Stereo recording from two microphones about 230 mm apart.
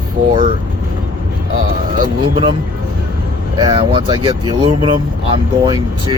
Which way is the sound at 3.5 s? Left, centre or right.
Right.